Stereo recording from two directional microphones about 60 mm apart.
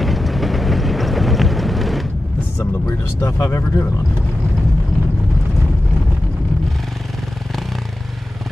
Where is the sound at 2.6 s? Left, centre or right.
Left.